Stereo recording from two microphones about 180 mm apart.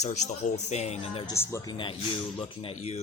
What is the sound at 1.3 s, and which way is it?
Speech, 20° left (ahead or behind).